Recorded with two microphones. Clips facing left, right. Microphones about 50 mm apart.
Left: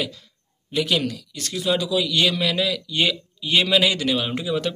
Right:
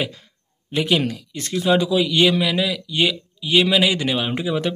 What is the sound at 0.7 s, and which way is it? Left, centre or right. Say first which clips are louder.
A man's voice: right 2 dB; right.